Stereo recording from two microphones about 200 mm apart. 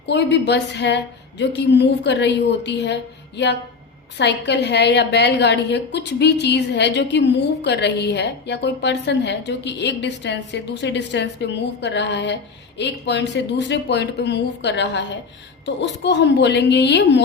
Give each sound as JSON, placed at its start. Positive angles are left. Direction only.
{"t": 0.0, "sound": "a woman's voice", "side_deg": 60}